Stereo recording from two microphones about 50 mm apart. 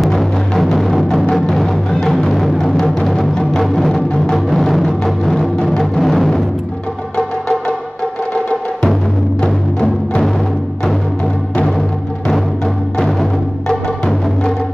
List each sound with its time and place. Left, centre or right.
0.0 s music: centre
9.4 s music: centre
13.2 s music: centre